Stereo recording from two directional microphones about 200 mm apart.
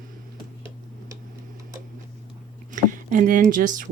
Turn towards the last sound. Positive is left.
turn(degrees=-40)  # may be behind; listen again after turning